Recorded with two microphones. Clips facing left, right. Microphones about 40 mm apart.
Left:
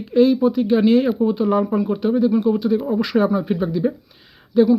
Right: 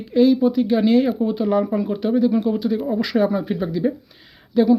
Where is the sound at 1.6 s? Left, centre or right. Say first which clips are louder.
Left 2 dB; centre.